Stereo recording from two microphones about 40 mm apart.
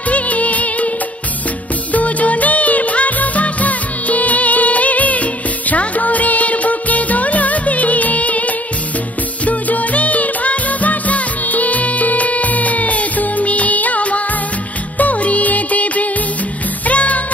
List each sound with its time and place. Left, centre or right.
0.1 s music: left
1.9 s music: left